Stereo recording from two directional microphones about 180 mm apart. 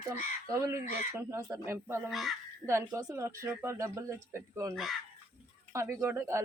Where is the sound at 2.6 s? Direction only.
15° right (ahead or behind).